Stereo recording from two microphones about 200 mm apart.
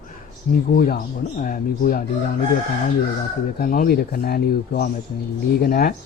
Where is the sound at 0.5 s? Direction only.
40° left (ahead or behind).